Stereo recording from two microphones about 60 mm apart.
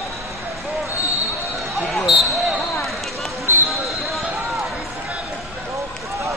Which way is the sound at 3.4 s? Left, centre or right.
Right.